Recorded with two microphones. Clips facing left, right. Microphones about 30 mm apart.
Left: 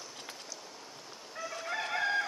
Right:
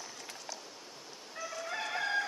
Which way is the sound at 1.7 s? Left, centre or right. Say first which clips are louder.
Left 2 dB; centre.